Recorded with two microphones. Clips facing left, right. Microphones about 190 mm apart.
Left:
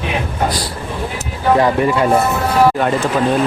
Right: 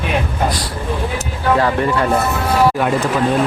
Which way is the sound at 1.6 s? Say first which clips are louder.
Left 2 dB; 15° left (ahead or behind).